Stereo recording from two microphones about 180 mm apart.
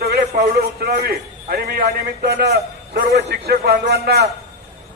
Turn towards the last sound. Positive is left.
turn(degrees=-60)  # may be behind; listen again after turning